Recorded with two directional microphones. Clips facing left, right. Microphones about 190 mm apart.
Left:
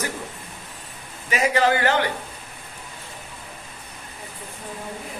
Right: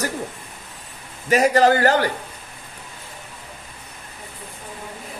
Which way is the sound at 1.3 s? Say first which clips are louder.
Right 5 dB; 40° right (ahead or behind).